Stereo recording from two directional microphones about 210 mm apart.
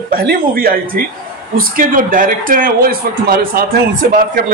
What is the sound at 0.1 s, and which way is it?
A man's voice, 45° right (ahead or behind).